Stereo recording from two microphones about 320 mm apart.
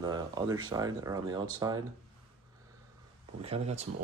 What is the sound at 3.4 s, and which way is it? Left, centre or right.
Speech, centre.